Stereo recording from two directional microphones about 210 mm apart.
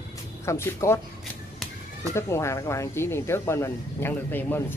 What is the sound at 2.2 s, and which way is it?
Speech, 15° left (ahead or behind).